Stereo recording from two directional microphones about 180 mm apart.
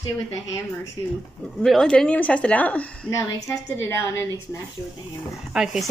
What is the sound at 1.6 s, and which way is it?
Speech, centre (ahead or behind).